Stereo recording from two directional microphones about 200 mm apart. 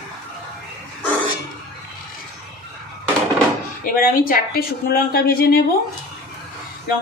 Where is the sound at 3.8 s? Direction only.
45° left (ahead or behind).